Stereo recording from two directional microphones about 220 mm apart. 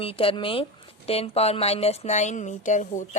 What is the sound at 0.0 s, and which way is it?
Speech, 25° left (ahead or behind).